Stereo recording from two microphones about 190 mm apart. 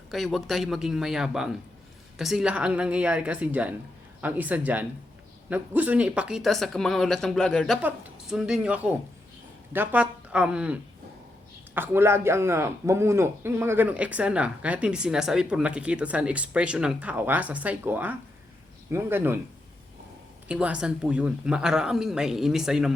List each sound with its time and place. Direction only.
0.1 s a man's voice: centre (ahead or behind)
20.5 s speech: 5° right (ahead or behind)